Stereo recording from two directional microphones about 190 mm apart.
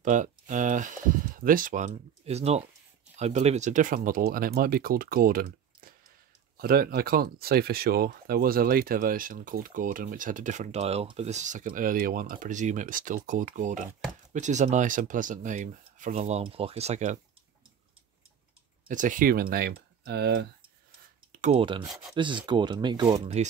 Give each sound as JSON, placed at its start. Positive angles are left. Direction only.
{"t": 0.0, "sound": "speech", "side_deg": -40}
{"t": 18.9, "sound": "speech", "side_deg": -45}
{"t": 21.3, "sound": "speech", "side_deg": -35}
{"t": 21.8, "sound": "speech", "side_deg": 0}
{"t": 22.1, "sound": "speech", "side_deg": -25}